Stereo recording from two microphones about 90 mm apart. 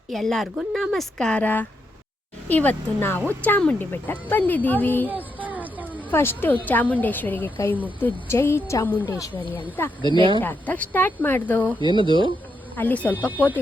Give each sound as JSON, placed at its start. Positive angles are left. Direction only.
{"t": 0.1, "sound": "speech", "side_deg": 5}
{"t": 1.3, "sound": "a woman's voice", "side_deg": 20}
{"t": 5.0, "sound": "a sound", "side_deg": -20}
{"t": 6.1, "sound": "a woman's voice", "side_deg": 25}
{"t": 10.2, "sound": "speech", "side_deg": -65}
{"t": 10.4, "sound": "a woman's voice", "side_deg": 20}
{"t": 11.8, "sound": "speech", "side_deg": -60}
{"t": 12.7, "sound": "a woman's voice", "side_deg": 20}